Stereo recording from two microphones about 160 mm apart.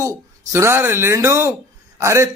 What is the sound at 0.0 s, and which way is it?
Speech, 15° right (ahead or behind).